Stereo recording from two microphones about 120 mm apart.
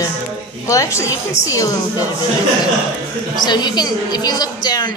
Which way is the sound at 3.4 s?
35° left (ahead or behind).